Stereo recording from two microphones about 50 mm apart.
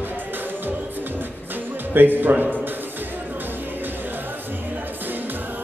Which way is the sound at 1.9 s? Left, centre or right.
Right.